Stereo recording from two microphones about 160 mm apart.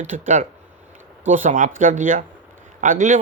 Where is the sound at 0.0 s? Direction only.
50° right (ahead or behind).